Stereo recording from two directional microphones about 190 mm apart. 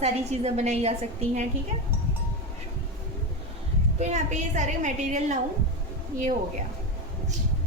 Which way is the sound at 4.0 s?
35° right (ahead or behind).